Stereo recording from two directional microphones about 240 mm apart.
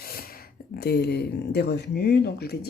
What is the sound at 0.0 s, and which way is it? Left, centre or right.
Speech, left.